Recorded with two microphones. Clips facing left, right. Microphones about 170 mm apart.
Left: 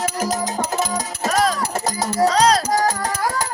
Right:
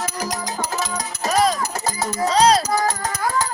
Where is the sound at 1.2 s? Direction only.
Centre (ahead or behind).